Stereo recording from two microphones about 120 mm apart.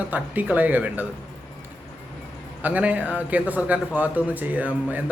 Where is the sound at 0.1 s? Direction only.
15° right (ahead or behind).